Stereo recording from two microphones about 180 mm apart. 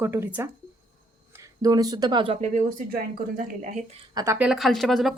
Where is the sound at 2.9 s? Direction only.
50° right (ahead or behind).